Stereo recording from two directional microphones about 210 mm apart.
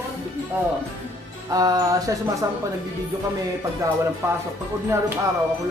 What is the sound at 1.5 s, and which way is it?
Speech, 15° right (ahead or behind).